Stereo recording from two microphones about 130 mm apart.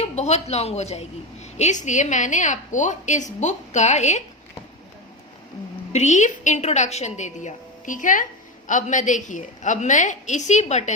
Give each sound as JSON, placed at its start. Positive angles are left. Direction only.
{"t": 0.0, "sound": "a woman's voice", "side_deg": 60}
{"t": 5.9, "sound": "a woman's voice", "side_deg": 65}